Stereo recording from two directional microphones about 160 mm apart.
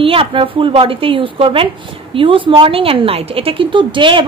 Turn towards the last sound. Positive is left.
turn(degrees=-30)  # may be behind; listen again after turning